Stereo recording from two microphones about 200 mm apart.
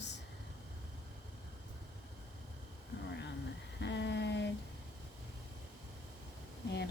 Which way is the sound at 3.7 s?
60° left (ahead or behind).